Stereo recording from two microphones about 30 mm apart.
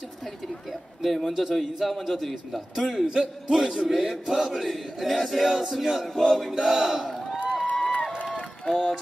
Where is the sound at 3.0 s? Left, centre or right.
Right.